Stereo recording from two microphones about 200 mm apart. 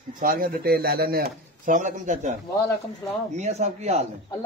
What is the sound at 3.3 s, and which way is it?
Speech, 35° right (ahead or behind).